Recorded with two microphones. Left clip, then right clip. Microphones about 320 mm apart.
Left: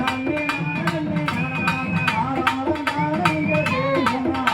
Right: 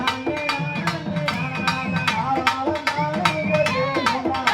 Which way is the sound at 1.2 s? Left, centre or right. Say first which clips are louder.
Right 2 dB; right.